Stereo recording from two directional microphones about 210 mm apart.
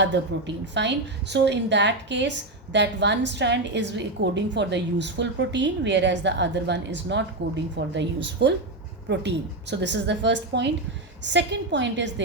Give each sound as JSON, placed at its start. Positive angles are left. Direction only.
{"t": 0.0, "sound": "a woman's voice", "side_deg": -55}